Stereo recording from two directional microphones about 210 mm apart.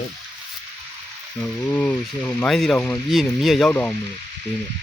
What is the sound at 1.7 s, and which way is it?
Speech, 5° left (ahead or behind).